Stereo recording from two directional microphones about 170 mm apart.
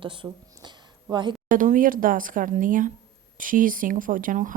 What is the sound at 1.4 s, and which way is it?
Speech, 50° right (ahead or behind).